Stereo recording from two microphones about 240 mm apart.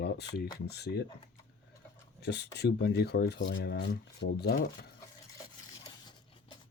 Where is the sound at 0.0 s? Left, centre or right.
Left.